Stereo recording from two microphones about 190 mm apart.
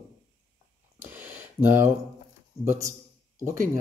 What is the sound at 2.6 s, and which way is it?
Speech, 10° right (ahead or behind).